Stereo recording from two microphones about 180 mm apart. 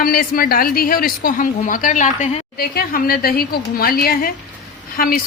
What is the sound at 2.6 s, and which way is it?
A woman's voice, 55° left (ahead or behind).